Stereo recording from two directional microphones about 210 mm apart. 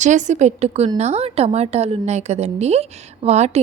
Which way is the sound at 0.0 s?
35° right (ahead or behind).